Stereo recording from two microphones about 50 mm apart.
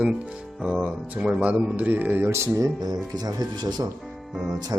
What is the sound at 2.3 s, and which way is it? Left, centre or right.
Speech, right.